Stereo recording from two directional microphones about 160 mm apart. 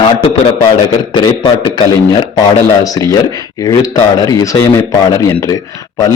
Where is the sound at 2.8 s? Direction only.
20° left (ahead or behind).